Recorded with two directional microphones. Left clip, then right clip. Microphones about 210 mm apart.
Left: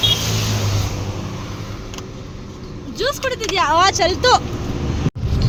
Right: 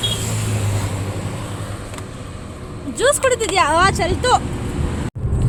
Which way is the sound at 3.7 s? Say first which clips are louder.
Left 1 dB; 5° right (ahead or behind).